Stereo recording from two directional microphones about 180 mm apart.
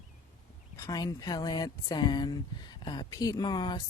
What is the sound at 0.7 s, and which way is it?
Speech, 20° left (ahead or behind).